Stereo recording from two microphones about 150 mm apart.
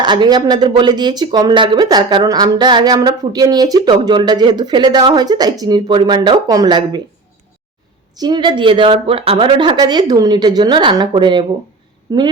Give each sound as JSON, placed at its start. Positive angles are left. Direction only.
{"t": 0.0, "sound": "speech", "side_deg": -30}
{"t": 8.1, "sound": "speech", "side_deg": -25}